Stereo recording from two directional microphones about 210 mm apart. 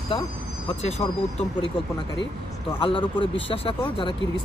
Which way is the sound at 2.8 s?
25° left (ahead or behind).